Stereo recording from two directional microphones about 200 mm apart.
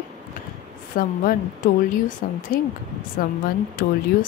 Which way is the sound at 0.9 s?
45° left (ahead or behind).